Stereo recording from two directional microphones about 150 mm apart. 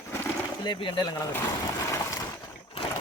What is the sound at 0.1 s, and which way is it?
Bird, 15° left (ahead or behind).